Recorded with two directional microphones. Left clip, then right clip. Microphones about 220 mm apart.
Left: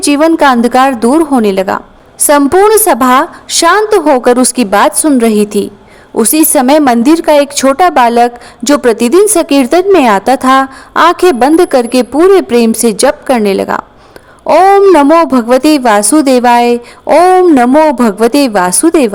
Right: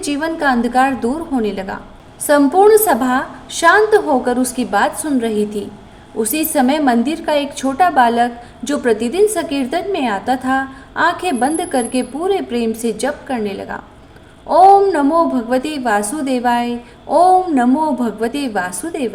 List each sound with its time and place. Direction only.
0.0 s a woman's voice: 50° left (ahead or behind)